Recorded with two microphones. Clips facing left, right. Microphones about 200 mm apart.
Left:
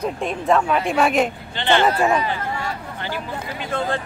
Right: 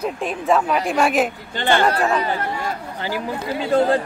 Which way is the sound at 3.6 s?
35° right (ahead or behind).